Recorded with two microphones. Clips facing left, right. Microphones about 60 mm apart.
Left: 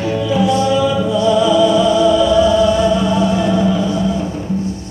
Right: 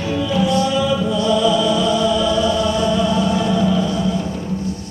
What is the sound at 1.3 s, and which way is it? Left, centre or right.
Music, centre.